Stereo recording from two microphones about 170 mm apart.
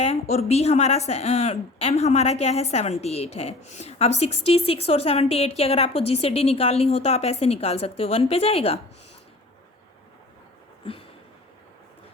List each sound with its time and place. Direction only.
0.0 s a woman's voice: 40° left (ahead or behind)